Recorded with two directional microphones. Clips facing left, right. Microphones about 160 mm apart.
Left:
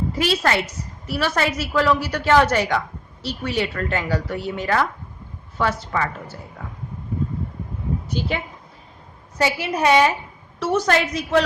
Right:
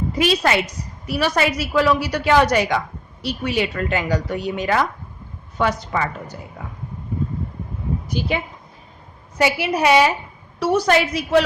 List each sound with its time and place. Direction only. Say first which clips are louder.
0.1 s a woman's voice: right 3 dB; 15° right (ahead or behind)
8.0 s a woman's voice: right 3 dB; 10° right (ahead or behind)
9.4 s a woman's voice: right 2 dB; 10° right (ahead or behind)